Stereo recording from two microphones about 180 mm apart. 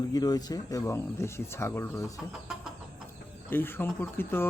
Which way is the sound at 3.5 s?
10° left (ahead or behind).